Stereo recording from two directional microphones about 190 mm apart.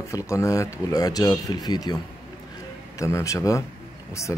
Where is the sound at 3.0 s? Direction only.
15° left (ahead or behind).